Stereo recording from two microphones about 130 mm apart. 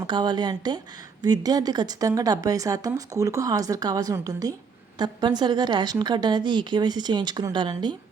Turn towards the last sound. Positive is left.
turn(degrees=-35)  # may be behind; listen again after turning